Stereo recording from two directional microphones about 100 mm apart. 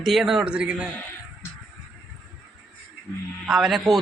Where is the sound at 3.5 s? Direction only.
5° right (ahead or behind).